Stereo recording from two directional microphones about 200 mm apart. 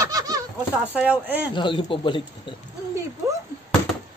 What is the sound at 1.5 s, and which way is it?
Speech, 25° left (ahead or behind).